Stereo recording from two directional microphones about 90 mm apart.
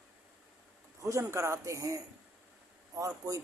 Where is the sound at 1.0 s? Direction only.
35° right (ahead or behind).